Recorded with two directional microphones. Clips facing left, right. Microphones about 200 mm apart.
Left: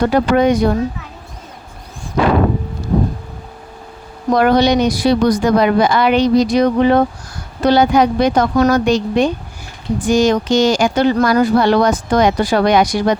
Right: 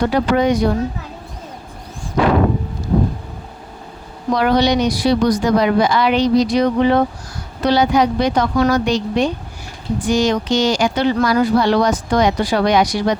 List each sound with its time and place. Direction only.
0.0 s speech: 50° left (ahead or behind)
4.3 s speech: 50° left (ahead or behind)